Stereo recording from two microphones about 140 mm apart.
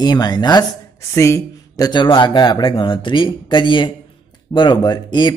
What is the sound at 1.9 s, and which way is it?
Speech, 35° left (ahead or behind).